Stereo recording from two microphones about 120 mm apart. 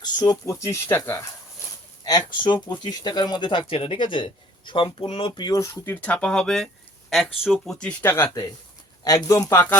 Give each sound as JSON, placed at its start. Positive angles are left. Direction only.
{"t": 0.0, "sound": "speech", "side_deg": 35}
{"t": 2.0, "sound": "speech", "side_deg": 40}
{"t": 5.5, "sound": "speech", "side_deg": 25}
{"t": 8.1, "sound": "speech", "side_deg": 25}